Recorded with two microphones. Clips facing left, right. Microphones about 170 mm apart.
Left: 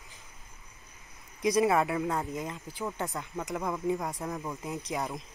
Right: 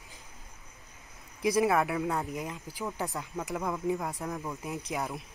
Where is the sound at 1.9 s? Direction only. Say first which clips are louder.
Even; 5° right (ahead or behind).